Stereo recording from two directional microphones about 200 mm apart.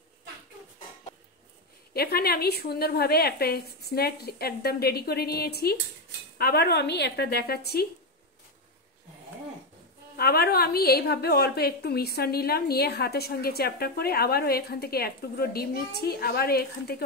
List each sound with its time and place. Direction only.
2.0 s a woman's voice: 50° left (ahead or behind)
10.1 s a woman's voice: 50° left (ahead or behind)